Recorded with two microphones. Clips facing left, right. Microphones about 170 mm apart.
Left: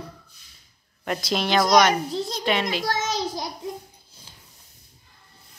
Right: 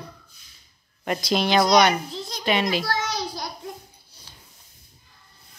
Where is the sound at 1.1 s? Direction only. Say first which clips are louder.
Right 2 dB; centre (ahead or behind).